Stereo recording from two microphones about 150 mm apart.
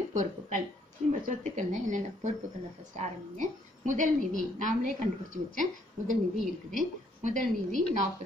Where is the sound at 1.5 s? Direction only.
55° right (ahead or behind).